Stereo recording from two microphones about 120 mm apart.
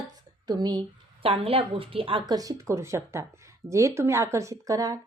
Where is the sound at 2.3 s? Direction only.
25° right (ahead or behind).